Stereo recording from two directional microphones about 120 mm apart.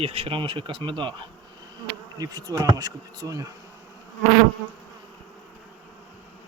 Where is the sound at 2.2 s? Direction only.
35° right (ahead or behind).